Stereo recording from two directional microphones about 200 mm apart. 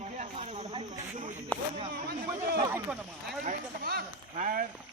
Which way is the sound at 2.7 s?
10° right (ahead or behind).